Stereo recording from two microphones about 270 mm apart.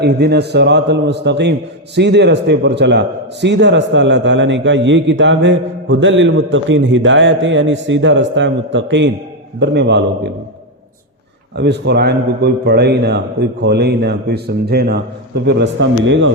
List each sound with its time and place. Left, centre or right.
0.0 s a man's voice: right
11.5 s a man's voice: right